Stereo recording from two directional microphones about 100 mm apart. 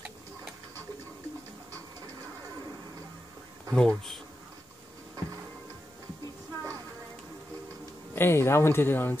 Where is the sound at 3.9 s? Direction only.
Centre (ahead or behind).